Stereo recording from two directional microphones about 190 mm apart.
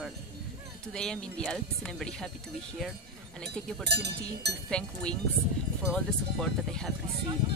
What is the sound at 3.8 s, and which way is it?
Speech, 60° right (ahead or behind).